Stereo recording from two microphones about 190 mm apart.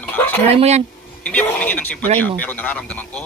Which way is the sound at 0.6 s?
35° right (ahead or behind).